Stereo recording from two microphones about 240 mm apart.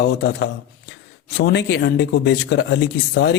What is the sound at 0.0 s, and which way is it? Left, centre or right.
A man's voice, left.